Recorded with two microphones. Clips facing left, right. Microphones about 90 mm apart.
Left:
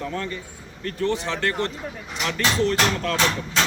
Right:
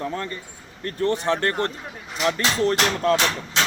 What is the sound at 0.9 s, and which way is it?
Speech, 50° right (ahead or behind).